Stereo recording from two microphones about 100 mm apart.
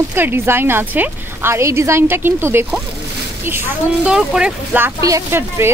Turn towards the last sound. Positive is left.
turn(degrees=-30)  # may be behind; listen again after turning